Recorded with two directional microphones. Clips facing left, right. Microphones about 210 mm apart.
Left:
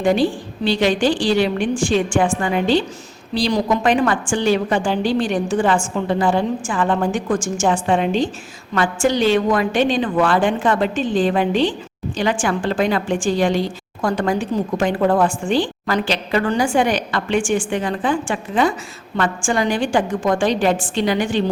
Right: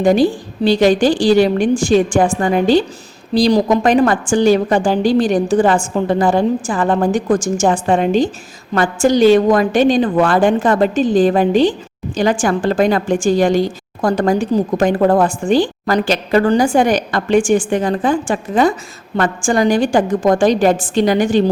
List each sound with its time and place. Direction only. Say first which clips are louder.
0.0 s a woman's voice: right 4 dB; 40° right (ahead or behind)